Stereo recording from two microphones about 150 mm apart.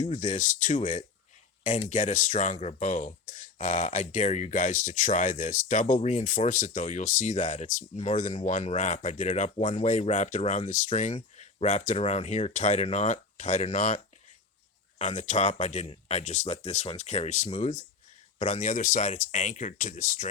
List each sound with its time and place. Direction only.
0.0 s speech: 50° left (ahead or behind)